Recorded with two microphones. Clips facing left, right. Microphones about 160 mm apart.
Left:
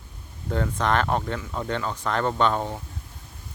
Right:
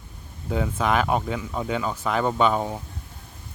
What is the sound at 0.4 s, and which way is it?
Speech, 5° right (ahead or behind).